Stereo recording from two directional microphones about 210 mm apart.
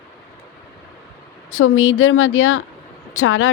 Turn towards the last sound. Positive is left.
turn(degrees=75)  # may be behind; listen again after turning